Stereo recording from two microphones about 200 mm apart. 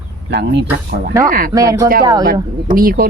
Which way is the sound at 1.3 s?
45° right (ahead or behind).